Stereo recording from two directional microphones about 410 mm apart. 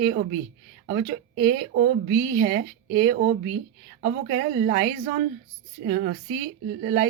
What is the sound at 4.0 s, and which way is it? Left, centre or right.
Speech, right.